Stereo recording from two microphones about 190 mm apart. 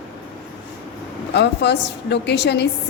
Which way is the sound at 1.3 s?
65° left (ahead or behind).